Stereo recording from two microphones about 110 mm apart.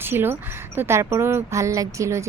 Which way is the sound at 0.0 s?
20° right (ahead or behind).